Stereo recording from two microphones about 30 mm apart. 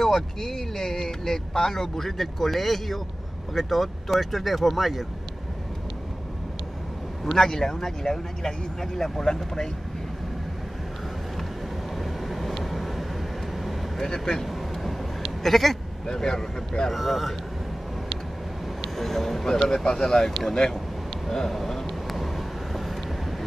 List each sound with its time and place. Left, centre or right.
0.0 s speech: centre
7.3 s speech: centre
12.0 s vehicle: centre
13.9 s speech: centre
14.4 s vehicle: centre
15.4 s speech: centre
16.1 s speech: centre
16.9 s speech: centre
18.8 s speech: centre
21.5 s a sound: centre
21.8 s vehicle: centre